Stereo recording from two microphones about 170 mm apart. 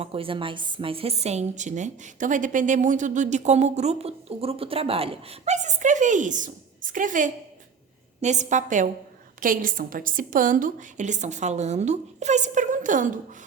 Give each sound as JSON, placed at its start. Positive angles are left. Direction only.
{"t": 0.0, "sound": "a woman's voice", "side_deg": -35}